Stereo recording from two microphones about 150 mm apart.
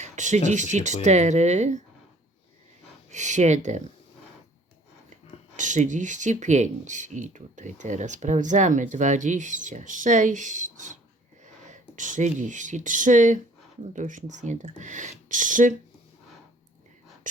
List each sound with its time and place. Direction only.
0.0 s speech: 50° right (ahead or behind)
3.1 s speech: 55° right (ahead or behind)
5.5 s speech: 55° right (ahead or behind)